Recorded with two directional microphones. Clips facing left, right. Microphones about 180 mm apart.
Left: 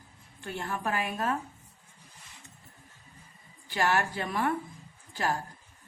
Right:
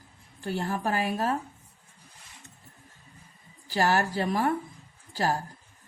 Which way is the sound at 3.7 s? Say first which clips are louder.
Right 3 dB; 35° right (ahead or behind).